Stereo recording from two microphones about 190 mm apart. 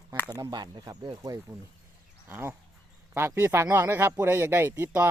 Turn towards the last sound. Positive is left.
turn(degrees=-10)  # may be behind; listen again after turning